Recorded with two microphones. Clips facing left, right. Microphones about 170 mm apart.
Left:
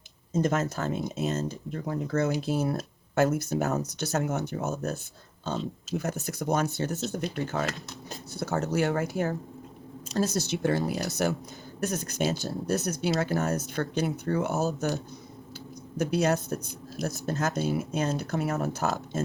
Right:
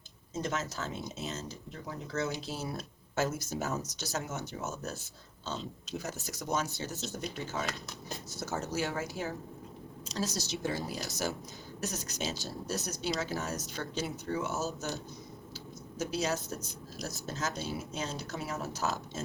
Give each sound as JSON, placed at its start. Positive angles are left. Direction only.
{"t": 0.3, "sound": "speech", "side_deg": 50}
{"t": 16.0, "sound": "speech", "side_deg": 60}